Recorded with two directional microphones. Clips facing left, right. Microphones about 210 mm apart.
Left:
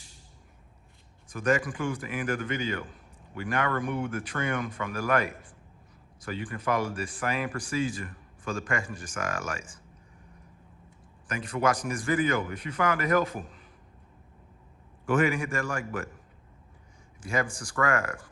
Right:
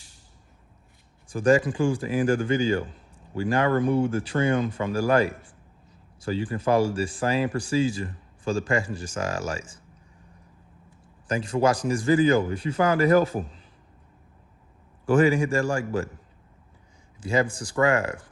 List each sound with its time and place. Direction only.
1.3 s speech: 30° right (ahead or behind)
11.3 s speech: 30° right (ahead or behind)
15.0 s speech: 30° right (ahead or behind)
17.2 s speech: 25° right (ahead or behind)